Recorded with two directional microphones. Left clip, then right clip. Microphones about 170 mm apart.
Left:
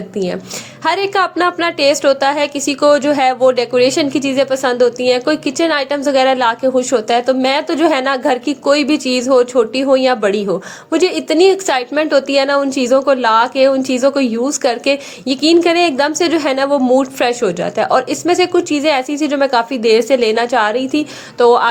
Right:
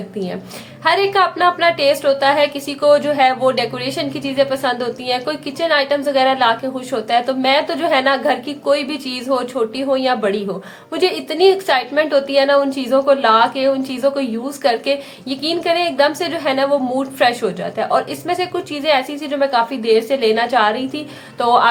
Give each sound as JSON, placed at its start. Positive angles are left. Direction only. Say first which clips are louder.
{"t": 0.9, "sound": "a woman's voice", "louder": "even", "side_deg": 40}